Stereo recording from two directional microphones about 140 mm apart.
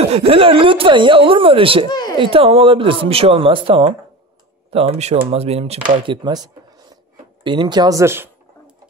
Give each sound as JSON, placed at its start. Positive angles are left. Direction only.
{"t": 0.1, "sound": "speech", "side_deg": -45}
{"t": 1.9, "sound": "speech", "side_deg": 30}
{"t": 2.1, "sound": "speech", "side_deg": -40}
{"t": 6.0, "sound": "speech", "side_deg": -30}